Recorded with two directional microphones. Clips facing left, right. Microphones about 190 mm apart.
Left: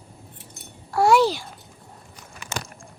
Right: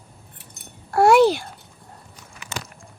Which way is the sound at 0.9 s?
55° right (ahead or behind).